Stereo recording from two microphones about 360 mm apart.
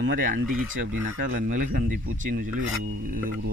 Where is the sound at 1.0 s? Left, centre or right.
Right.